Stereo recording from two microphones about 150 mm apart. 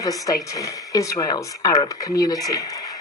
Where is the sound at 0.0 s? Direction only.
25° left (ahead or behind).